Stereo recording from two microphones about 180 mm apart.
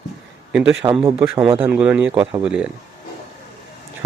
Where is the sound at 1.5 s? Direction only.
10° right (ahead or behind).